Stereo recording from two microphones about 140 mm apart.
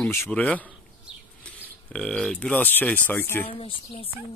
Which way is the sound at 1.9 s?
5° left (ahead or behind).